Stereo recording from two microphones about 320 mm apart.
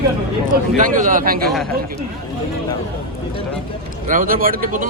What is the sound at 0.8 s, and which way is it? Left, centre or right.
Speech, right.